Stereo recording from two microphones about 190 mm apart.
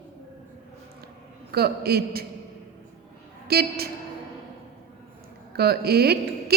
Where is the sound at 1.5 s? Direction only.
55° right (ahead or behind).